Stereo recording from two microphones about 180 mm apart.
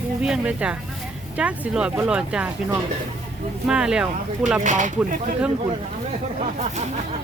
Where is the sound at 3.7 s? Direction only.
5° right (ahead or behind).